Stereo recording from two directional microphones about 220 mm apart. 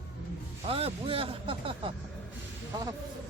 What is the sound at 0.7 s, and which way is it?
Speech, 25° right (ahead or behind).